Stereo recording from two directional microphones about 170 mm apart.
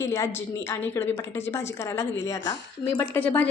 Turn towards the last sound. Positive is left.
turn(degrees=10)  # may be behind; listen again after turning